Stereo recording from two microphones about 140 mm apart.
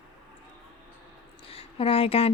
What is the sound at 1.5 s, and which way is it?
Speech, 40° left (ahead or behind).